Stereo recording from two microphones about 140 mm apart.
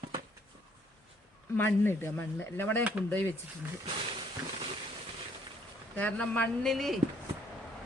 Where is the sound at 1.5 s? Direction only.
15° left (ahead or behind).